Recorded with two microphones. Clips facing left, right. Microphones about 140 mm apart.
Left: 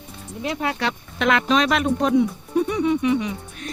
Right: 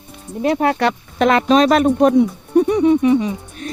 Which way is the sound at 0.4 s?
50° right (ahead or behind).